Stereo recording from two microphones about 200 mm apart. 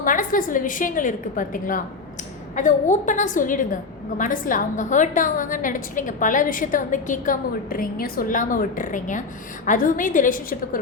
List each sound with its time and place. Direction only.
0.0 s a woman's voice: 40° left (ahead or behind)